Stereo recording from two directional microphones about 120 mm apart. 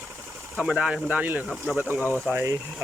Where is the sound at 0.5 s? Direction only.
10° right (ahead or behind).